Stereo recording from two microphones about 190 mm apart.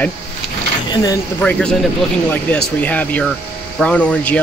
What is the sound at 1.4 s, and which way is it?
Speech, 5° left (ahead or behind).